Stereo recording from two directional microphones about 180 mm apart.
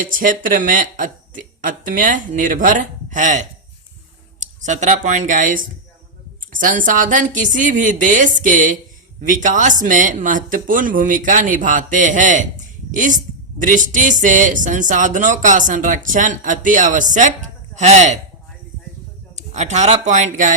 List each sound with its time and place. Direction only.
0.0 s speech: 50° right (ahead or behind)
19.4 s speech: 40° right (ahead or behind)